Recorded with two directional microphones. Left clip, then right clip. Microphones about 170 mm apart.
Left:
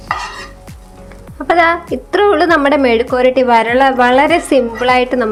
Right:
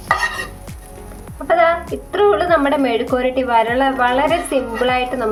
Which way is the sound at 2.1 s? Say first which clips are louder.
Left 3 dB; 40° left (ahead or behind).